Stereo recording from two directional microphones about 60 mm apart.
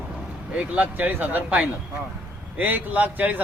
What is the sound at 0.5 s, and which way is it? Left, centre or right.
Speech, right.